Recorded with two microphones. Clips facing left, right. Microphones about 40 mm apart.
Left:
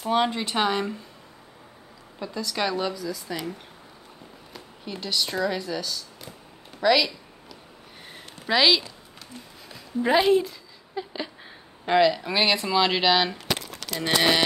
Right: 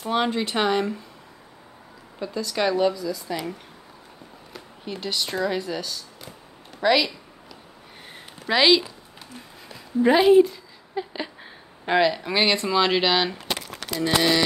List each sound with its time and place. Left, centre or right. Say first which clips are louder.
0.0 s speech: even; centre
2.1 s speech: right 3 dB; centre
4.6 s speech: right 2 dB; centre
8.5 s speech: right 2 dB; centre
9.7 s a sound: right 4 dB; centre
11.8 s speech: left 1 dB; centre
13.9 s speech: right 1 dB; left